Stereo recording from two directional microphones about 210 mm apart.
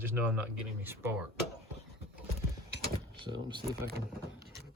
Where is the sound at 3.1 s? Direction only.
20° right (ahead or behind).